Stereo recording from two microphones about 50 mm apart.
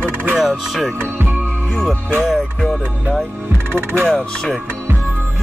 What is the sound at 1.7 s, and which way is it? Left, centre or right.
Music, centre.